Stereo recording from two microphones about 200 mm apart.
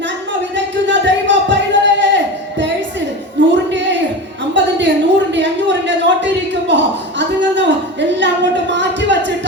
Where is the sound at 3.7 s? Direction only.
65° right (ahead or behind).